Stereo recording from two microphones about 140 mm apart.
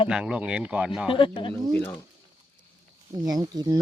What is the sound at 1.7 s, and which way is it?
Speech, 15° left (ahead or behind).